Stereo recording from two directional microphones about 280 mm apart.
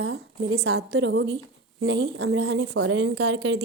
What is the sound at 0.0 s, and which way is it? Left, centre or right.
A woman's voice, right.